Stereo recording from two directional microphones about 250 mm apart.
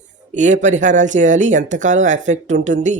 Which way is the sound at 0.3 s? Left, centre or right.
Right.